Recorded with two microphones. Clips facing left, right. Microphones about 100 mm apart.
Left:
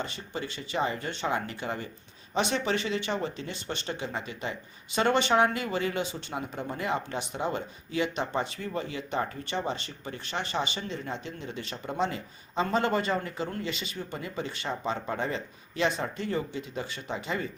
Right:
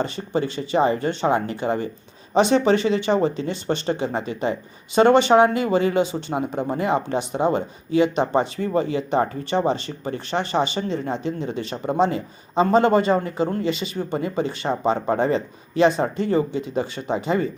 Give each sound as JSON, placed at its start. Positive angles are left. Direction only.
{"t": 0.0, "sound": "speech", "side_deg": -35}